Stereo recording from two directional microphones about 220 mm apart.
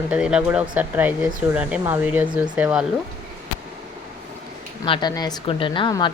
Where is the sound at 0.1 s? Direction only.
5° right (ahead or behind).